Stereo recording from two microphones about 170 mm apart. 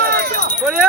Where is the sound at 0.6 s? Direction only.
Centre (ahead or behind).